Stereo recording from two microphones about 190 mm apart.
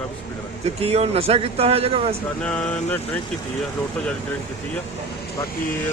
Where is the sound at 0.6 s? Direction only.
35° right (ahead or behind).